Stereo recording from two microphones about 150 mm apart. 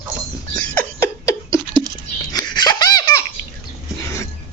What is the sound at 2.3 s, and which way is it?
Laughter, 25° left (ahead or behind).